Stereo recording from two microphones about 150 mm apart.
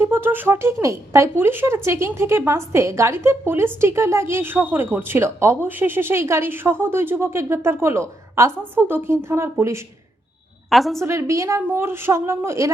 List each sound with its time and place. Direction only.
0.1 s a woman's voice: 15° right (ahead or behind)
10.7 s a woman's voice: centre (ahead or behind)
11.0 s a woman's voice: 15° right (ahead or behind)